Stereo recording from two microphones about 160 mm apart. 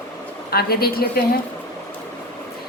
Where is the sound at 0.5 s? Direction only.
75° left (ahead or behind).